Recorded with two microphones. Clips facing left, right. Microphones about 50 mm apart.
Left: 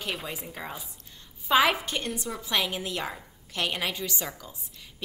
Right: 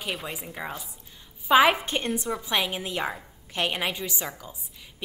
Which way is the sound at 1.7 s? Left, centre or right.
Right.